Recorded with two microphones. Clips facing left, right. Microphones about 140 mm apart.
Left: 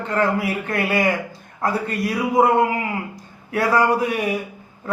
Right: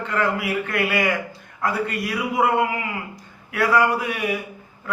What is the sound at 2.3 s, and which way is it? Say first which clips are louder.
A man's voice: left 4 dB; 35° left (ahead or behind).